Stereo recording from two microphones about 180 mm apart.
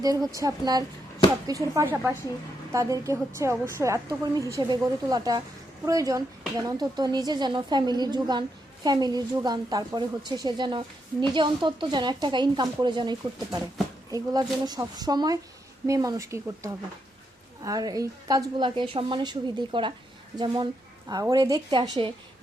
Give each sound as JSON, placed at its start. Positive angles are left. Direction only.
{"t": 0.0, "sound": "a woman's voice", "side_deg": -20}
{"t": 21.1, "sound": "a woman's voice", "side_deg": -20}